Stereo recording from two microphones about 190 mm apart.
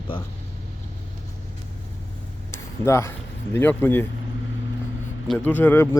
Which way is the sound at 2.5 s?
15° left (ahead or behind).